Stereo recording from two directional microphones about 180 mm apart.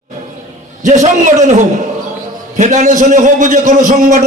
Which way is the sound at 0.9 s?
45° right (ahead or behind).